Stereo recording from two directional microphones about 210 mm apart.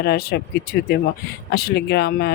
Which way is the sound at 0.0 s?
50° left (ahead or behind).